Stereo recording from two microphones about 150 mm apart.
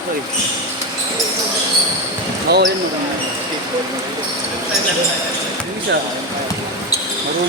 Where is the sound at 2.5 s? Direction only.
90° right.